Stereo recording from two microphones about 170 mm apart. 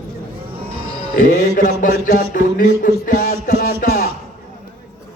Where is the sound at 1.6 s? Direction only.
55° left (ahead or behind).